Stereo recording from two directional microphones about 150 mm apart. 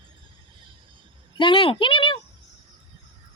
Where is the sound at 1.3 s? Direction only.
35° left (ahead or behind).